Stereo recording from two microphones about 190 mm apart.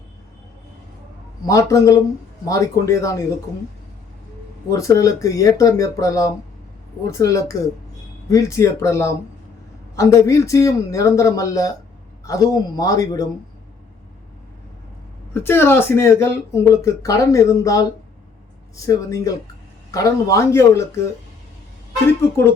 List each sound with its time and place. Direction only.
1.5 s speech: 15° left (ahead or behind)
4.7 s speech: 15° left (ahead or behind)
15.3 s speech: 10° left (ahead or behind)
18.9 s speech: 15° left (ahead or behind)